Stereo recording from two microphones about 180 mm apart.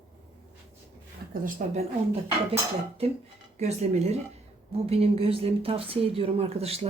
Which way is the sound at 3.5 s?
40° right (ahead or behind).